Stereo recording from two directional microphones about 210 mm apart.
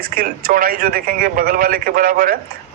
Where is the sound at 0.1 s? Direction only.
45° right (ahead or behind).